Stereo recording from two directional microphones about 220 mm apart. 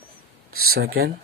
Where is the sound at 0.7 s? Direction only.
45° right (ahead or behind).